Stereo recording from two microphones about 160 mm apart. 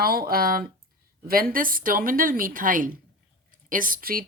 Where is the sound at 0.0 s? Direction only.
70° right (ahead or behind).